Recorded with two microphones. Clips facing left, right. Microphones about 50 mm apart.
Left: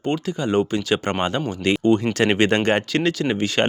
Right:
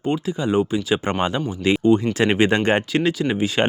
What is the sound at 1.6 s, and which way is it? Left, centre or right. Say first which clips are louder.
Speech: right 2 dB; left.